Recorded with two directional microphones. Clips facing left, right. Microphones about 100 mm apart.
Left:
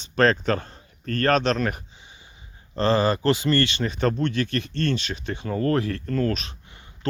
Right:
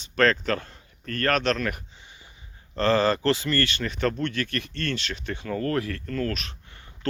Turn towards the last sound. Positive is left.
turn(degrees=20)  # may be behind; listen again after turning